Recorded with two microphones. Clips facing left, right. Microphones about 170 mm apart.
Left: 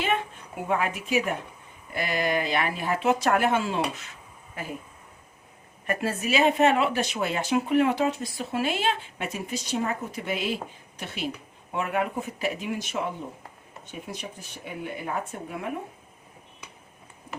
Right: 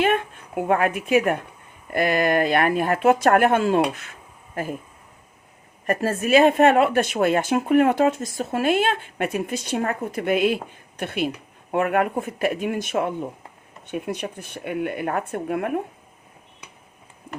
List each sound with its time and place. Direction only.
0.0 s a sound: 55° right (ahead or behind)
0.7 s speech: 55° right (ahead or behind)
5.8 s speech: 40° right (ahead or behind); by 15.8 s 60° right (ahead or behind)